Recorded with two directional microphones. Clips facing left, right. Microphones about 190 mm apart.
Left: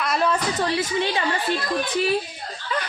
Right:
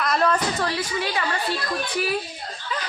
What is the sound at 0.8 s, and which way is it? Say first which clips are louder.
Speech: left 3 dB; 25° left (ahead or behind).